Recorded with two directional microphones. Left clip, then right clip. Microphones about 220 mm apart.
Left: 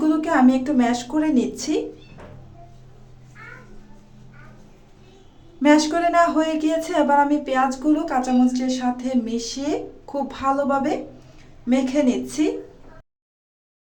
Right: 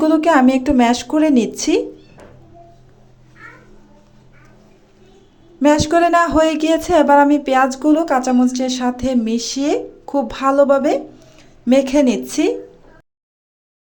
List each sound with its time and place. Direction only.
0.0 s speech: 40° right (ahead or behind)
5.6 s speech: 35° right (ahead or behind)